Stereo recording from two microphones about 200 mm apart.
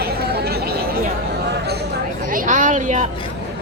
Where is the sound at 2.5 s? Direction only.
40° right (ahead or behind).